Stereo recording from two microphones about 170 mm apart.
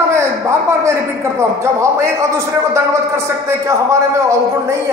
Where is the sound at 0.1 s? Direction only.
15° right (ahead or behind).